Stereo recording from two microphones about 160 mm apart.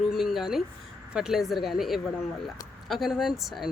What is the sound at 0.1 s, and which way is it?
Speech, centre (ahead or behind).